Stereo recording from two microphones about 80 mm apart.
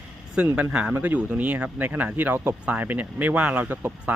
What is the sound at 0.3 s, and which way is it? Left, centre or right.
Speech, centre.